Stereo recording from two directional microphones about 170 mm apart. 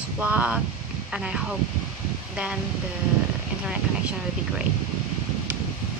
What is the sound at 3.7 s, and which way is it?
Speech, 5° right (ahead or behind).